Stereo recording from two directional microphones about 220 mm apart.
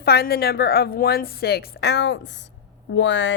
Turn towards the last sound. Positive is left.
turn(degrees=55)  # may be behind; listen again after turning